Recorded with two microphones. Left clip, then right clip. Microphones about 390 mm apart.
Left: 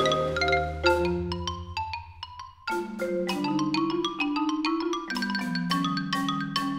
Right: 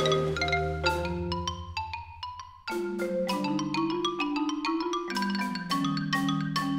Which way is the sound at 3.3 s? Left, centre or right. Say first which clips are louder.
Left 2 dB; left.